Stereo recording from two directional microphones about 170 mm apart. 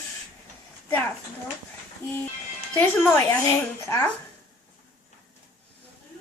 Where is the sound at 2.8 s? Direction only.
15° left (ahead or behind).